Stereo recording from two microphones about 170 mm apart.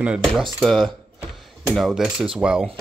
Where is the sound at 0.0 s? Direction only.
Centre (ahead or behind).